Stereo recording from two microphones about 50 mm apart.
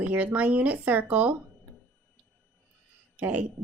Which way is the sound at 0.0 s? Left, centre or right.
Right.